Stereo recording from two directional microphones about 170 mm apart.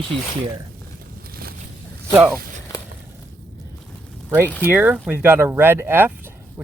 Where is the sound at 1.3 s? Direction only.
60° right (ahead or behind).